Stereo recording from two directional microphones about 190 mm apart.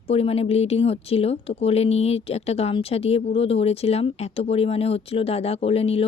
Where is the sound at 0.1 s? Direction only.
30° left (ahead or behind).